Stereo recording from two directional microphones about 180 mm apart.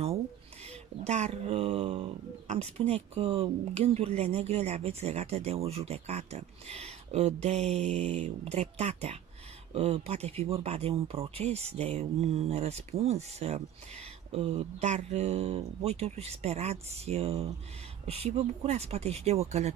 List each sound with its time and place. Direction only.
0.7 s speech: 40° right (ahead or behind)